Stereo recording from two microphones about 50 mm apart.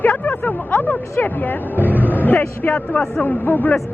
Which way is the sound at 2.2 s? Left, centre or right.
Left.